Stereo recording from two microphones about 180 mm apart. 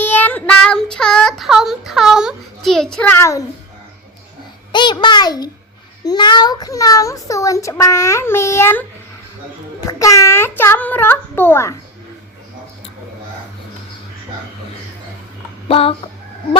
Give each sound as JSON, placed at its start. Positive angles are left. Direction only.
{"t": 0.0, "sound": "child singing", "side_deg": 10}
{"t": 2.6, "sound": "a sound", "side_deg": 0}
{"t": 4.7, "sound": "a child's voice", "side_deg": 25}
{"t": 9.8, "sound": "a child's voice", "side_deg": 20}
{"t": 15.7, "sound": "fowl", "side_deg": 30}